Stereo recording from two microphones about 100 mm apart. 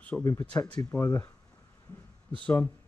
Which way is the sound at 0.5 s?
30° left (ahead or behind).